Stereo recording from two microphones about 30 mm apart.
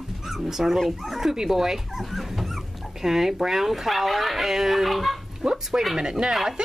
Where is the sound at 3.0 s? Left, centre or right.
Centre.